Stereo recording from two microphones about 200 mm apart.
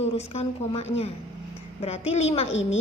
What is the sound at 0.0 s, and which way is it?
A woman's voice, 30° left (ahead or behind).